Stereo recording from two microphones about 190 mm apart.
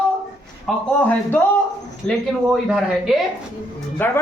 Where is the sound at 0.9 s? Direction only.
5° left (ahead or behind).